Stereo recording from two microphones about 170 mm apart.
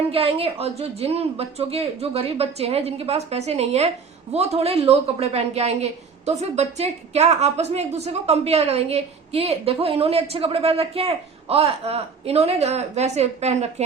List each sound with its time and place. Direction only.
0.1 s a woman's voice: 35° right (ahead or behind)